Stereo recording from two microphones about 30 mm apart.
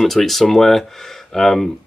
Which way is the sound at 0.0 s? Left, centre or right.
Centre.